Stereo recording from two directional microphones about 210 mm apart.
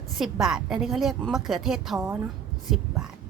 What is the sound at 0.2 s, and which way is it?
Speech, centre (ahead or behind).